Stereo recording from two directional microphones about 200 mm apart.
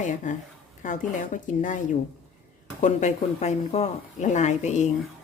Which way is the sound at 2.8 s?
35° left (ahead or behind).